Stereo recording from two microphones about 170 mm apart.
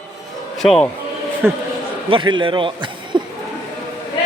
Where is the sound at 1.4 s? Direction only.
15° right (ahead or behind).